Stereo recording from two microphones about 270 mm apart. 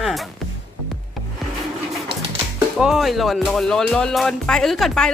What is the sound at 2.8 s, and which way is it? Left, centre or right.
Speech, centre.